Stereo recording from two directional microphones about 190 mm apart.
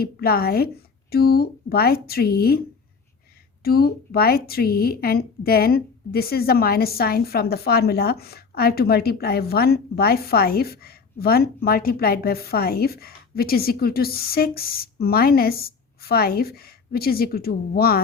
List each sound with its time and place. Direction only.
0.0 s a woman's voice: 55° left (ahead or behind)